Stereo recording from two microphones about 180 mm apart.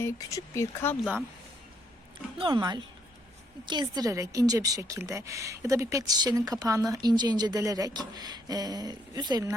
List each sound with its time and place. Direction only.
0.0 s speech: 20° left (ahead or behind)
2.4 s a woman's voice: 25° right (ahead or behind)